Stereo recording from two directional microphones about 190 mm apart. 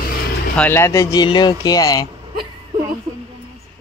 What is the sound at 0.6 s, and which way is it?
Speech, 10° left (ahead or behind).